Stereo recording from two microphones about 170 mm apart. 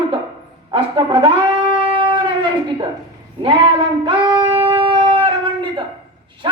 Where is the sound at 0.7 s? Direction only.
30° right (ahead or behind).